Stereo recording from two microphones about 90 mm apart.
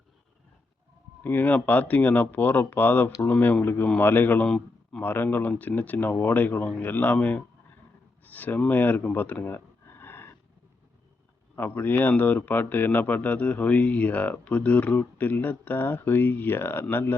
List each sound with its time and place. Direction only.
1.2 s a man's voice: 20° left (ahead or behind)
4.4 s a man's voice: 5° left (ahead or behind)
5.0 s a man's voice: 25° left (ahead or behind)
11.5 s a man's voice: 25° left (ahead or behind)